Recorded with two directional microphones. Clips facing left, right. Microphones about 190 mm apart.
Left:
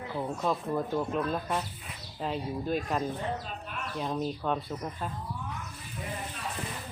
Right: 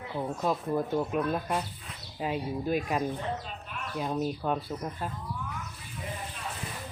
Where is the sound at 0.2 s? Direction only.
10° right (ahead or behind).